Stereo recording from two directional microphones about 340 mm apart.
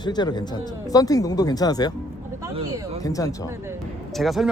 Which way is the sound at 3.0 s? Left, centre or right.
Centre.